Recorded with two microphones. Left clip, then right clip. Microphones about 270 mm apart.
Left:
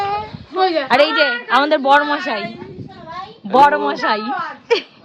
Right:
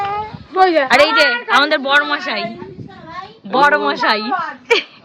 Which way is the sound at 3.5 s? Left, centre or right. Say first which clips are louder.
Left 1 dB; centre.